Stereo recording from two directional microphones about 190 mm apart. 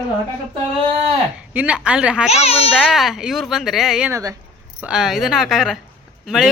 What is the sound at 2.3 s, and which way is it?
Speech, 35° left (ahead or behind).